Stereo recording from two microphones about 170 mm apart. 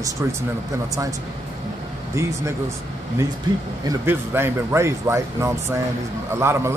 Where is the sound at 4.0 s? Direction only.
15° right (ahead or behind).